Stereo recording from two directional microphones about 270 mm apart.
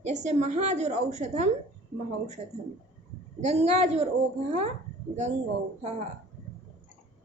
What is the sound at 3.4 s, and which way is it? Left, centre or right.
Speech, right.